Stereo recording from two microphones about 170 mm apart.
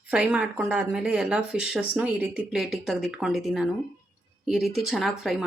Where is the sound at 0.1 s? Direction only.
5° right (ahead or behind).